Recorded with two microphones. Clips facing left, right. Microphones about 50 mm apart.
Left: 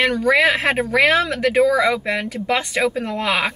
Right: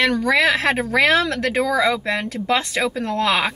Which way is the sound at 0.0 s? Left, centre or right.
Centre.